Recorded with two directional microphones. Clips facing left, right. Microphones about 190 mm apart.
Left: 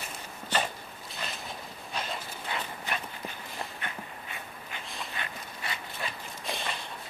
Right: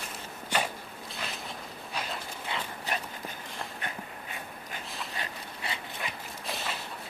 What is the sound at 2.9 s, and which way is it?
Walk, 35° right (ahead or behind).